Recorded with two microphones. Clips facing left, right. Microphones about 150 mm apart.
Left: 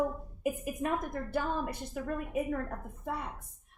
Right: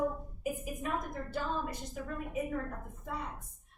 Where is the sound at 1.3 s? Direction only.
60° left (ahead or behind).